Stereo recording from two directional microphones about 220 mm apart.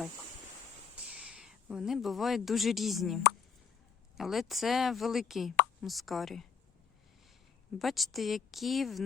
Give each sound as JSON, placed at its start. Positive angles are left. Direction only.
{"t": 1.0, "sound": "speech", "side_deg": -5}
{"t": 4.2, "sound": "speech", "side_deg": 0}
{"t": 7.8, "sound": "speech", "side_deg": 0}